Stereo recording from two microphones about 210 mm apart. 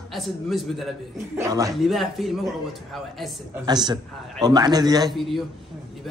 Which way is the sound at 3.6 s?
20° right (ahead or behind).